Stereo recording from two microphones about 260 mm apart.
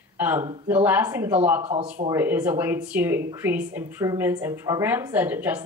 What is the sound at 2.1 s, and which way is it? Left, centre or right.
Speech, centre.